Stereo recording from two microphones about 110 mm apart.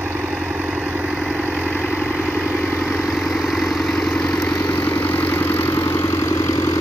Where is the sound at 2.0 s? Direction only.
15° left (ahead or behind).